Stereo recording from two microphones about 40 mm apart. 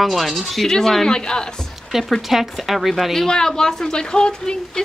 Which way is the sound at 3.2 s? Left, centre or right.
Centre.